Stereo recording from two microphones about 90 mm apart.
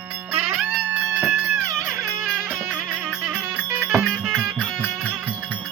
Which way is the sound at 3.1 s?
15° right (ahead or behind).